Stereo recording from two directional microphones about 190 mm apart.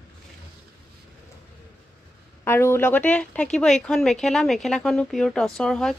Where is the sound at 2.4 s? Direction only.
10° left (ahead or behind).